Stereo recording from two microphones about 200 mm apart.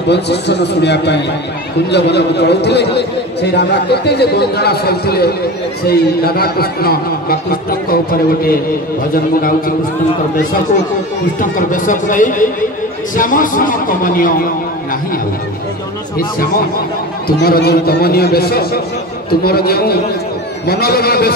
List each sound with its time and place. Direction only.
0.1 s a man's voice: 60° left (ahead or behind)
11.5 s a man's voice: 40° left (ahead or behind)
17.4 s a man's voice: 50° left (ahead or behind)